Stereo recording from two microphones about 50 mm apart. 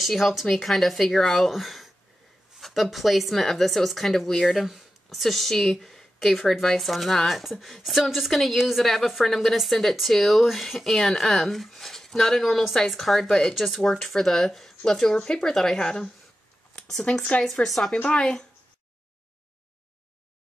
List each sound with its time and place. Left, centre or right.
0.0 s speech: centre
17.1 s speech: left
17.6 s speech: centre
18.0 s speech: left